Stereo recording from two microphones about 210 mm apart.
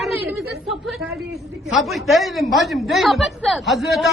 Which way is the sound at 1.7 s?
Centre (ahead or behind).